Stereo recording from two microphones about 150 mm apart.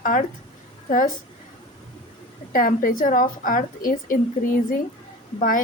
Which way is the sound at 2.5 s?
65° left (ahead or behind).